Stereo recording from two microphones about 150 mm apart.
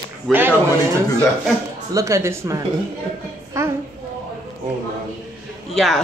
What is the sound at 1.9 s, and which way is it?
Speech, 20° right (ahead or behind).